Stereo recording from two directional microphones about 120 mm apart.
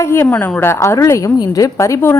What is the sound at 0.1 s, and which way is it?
A woman's voice, 20° left (ahead or behind).